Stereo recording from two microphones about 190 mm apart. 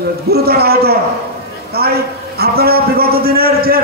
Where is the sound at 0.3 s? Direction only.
55° right (ahead or behind).